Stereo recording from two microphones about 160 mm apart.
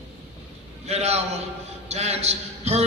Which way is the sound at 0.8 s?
40° right (ahead or behind).